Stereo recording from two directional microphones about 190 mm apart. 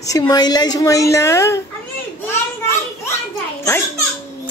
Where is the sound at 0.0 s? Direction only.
20° left (ahead or behind).